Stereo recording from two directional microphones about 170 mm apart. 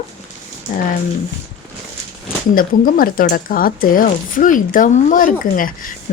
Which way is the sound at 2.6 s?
55° left (ahead or behind).